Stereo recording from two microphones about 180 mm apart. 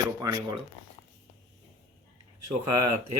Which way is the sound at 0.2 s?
20° right (ahead or behind).